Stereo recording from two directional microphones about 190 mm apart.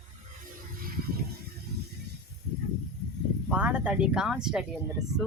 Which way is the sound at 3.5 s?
5° right (ahead or behind).